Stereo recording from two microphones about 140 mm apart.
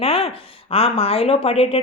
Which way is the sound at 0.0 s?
45° left (ahead or behind).